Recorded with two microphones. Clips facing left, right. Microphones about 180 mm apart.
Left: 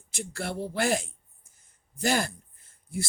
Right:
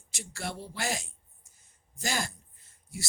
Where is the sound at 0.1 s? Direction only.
55° left (ahead or behind).